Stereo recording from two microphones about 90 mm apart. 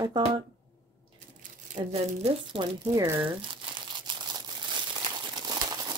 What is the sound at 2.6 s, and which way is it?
Speech, 85° right.